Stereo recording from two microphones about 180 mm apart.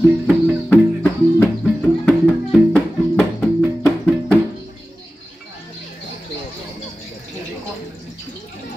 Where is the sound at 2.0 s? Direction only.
Centre (ahead or behind).